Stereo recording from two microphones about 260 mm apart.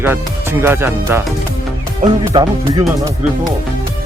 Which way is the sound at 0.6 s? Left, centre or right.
Centre.